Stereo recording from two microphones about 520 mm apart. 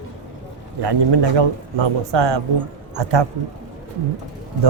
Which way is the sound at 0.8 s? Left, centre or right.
Right.